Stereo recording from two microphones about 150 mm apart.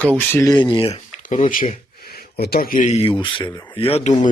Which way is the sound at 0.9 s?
55° left (ahead or behind).